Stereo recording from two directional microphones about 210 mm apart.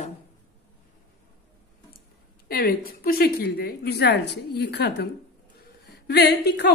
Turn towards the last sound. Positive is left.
turn(degrees=50)  # may be behind; listen again after turning